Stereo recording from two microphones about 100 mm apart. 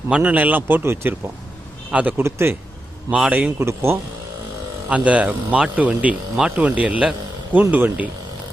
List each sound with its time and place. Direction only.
0.1 s speech: 15° right (ahead or behind)
3.1 s speech: 15° right (ahead or behind)
3.6 s speech: 25° right (ahead or behind)
4.9 s speech: 15° right (ahead or behind)